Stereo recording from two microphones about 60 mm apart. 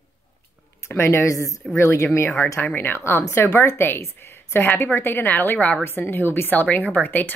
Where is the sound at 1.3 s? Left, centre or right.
Left.